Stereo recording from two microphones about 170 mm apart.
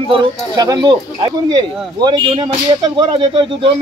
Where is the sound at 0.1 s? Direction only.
30° right (ahead or behind).